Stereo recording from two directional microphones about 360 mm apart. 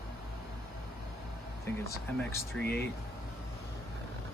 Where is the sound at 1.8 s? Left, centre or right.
Centre.